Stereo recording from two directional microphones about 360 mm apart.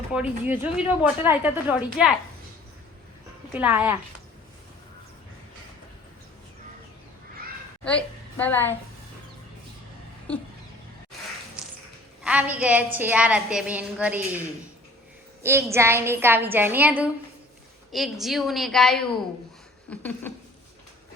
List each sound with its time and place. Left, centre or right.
0.1 s a woman's voice: centre
3.5 s a woman's voice: centre
7.9 s a woman's voice: centre
10.3 s a woman's voice: centre
12.2 s a woman's voice: centre
15.4 s a woman's voice: centre